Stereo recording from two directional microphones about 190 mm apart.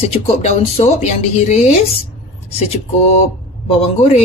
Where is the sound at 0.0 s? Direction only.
30° left (ahead or behind).